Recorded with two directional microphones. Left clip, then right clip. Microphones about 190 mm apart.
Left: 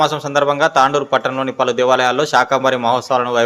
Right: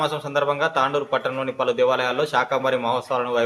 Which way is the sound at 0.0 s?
45° left (ahead or behind).